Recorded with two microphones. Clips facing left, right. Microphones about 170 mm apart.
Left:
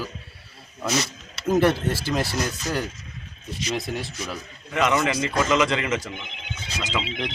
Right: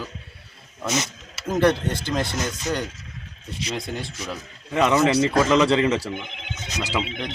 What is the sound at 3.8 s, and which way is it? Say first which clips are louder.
Speech: left 1 dB; centre (ahead or behind).